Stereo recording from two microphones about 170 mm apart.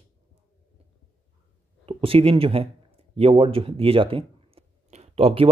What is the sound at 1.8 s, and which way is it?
Speech, 35° right (ahead or behind).